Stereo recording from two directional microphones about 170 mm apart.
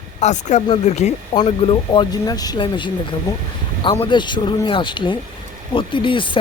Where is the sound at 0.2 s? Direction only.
45° left (ahead or behind).